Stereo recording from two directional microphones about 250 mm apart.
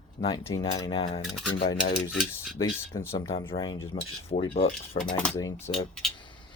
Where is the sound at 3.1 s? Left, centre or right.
Left.